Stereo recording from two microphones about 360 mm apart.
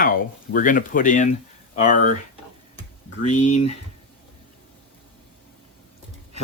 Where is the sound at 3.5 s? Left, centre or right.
Left.